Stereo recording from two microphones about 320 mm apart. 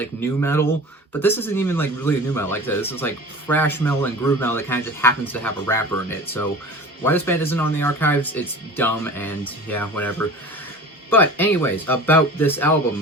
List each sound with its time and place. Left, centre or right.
0.0 s speech: centre